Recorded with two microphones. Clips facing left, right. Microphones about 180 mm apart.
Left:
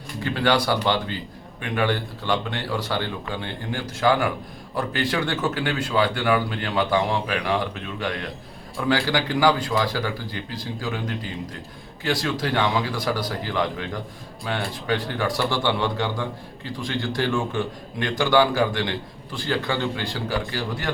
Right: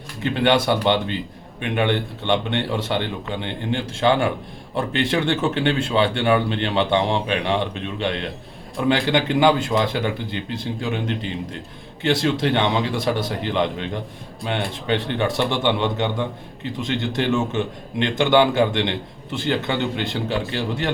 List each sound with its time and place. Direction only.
0.2 s a man's voice: 25° right (ahead or behind)